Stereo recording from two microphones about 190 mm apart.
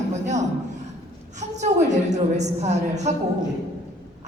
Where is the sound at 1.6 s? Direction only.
40° right (ahead or behind).